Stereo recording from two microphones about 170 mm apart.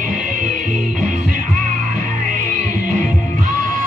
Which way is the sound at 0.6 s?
50° right (ahead or behind).